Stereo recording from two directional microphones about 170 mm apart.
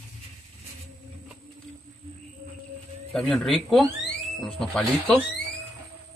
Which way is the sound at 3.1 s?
5° left (ahead or behind).